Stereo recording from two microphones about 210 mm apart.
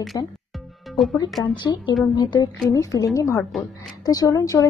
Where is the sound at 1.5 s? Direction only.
20° left (ahead or behind).